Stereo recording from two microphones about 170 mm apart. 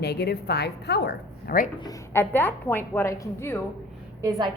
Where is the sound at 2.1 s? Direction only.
10° left (ahead or behind).